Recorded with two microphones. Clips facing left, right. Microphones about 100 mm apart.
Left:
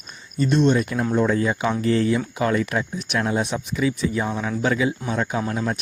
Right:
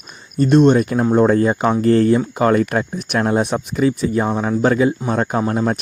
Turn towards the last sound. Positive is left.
turn(degrees=-45)  # may be behind; listen again after turning